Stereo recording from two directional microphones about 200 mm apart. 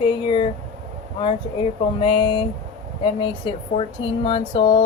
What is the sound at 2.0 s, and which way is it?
Speech, 25° left (ahead or behind).